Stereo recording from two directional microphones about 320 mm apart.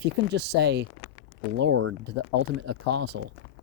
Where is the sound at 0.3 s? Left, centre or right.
Right.